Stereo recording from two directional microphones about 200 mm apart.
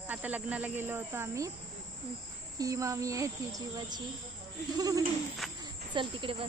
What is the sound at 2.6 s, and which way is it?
Speech, 15° right (ahead or behind).